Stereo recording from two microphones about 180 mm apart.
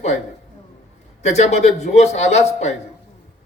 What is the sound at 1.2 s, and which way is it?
A man's voice, 40° left (ahead or behind).